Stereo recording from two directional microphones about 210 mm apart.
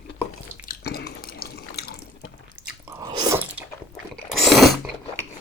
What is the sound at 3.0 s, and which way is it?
Chewing, 20° right (ahead or behind).